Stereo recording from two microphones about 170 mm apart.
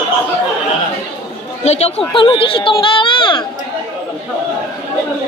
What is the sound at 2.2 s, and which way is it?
Speech, 30° left (ahead or behind).